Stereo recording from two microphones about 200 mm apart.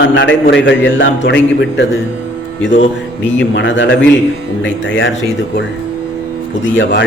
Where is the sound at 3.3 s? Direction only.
70° left (ahead or behind).